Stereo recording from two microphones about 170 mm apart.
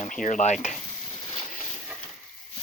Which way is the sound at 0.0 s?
50° left (ahead or behind).